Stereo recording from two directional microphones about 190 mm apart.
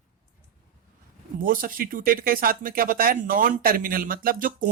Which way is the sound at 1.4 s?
45° right (ahead or behind).